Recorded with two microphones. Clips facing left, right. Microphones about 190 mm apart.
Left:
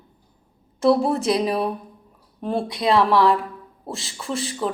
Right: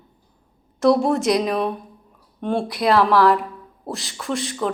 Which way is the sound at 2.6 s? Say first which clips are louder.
Right 2 dB; 25° left (ahead or behind).